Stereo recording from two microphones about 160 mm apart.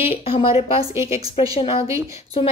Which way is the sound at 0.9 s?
15° right (ahead or behind).